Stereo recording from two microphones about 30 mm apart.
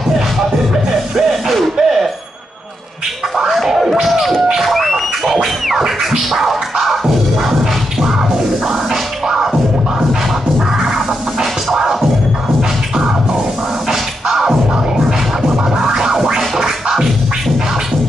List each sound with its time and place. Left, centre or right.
1.1 s mechanisms: centre
3.6 s scratching: centre
4.6 s speech: centre
5.3 s music: centre
6.3 s scratching: centre
9.3 s scratching: centre
11.7 s music: centre
13.8 s scratching: centre
16.3 s music: centre